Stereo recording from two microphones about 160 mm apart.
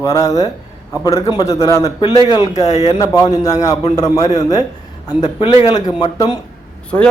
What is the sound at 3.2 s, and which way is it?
A man's voice, 25° left (ahead or behind).